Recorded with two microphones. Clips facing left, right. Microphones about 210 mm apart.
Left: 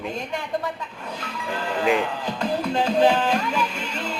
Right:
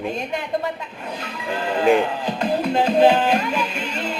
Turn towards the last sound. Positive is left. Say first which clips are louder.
# right 3 dB
turn(degrees=-20)  # may be behind; listen again after turning